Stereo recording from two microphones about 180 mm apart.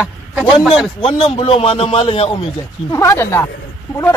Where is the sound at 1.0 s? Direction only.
35° left (ahead or behind).